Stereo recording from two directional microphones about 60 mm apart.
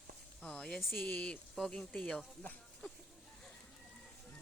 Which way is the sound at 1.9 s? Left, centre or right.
Centre.